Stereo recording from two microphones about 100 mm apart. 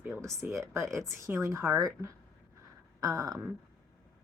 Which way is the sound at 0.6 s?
25° right (ahead or behind).